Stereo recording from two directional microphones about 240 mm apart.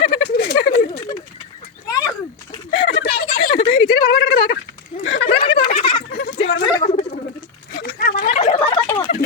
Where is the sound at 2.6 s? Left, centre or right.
Left.